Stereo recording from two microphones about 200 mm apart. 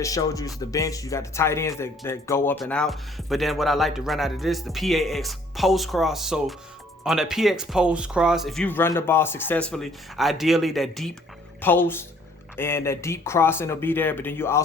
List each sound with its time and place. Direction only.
0.0 s speech: 15° left (ahead or behind)